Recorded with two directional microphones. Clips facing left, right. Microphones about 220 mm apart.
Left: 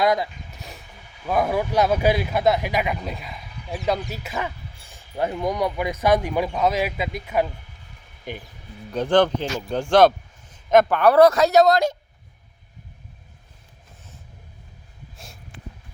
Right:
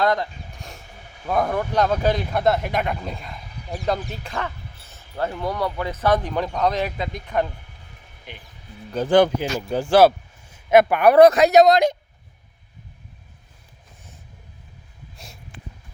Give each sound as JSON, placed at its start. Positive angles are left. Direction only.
{"t": 0.0, "sound": "a sound", "side_deg": 10}
{"t": 1.3, "sound": "speech", "side_deg": 5}
{"t": 8.3, "sound": "speech", "side_deg": 45}
{"t": 8.9, "sound": "speech", "side_deg": -5}